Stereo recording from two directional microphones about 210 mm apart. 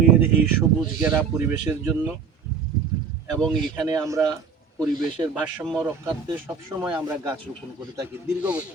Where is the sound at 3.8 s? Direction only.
15° right (ahead or behind).